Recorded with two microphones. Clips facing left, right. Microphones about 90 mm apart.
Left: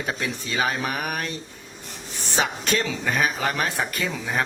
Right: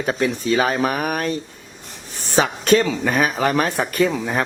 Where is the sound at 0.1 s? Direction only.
40° right (ahead or behind).